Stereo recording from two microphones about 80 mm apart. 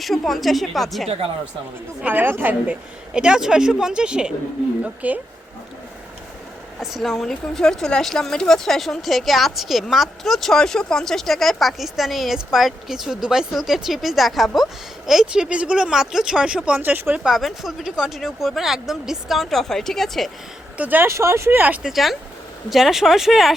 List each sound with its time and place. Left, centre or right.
0.0 s speech: centre
2.0 s a woman's voice: right
3.1 s a woman's voice: centre
6.7 s speech: centre; by 17.2 s right
17.2 s speech: centre
20.7 s a woman's voice: right
21.1 s speech: right
21.8 s speech: centre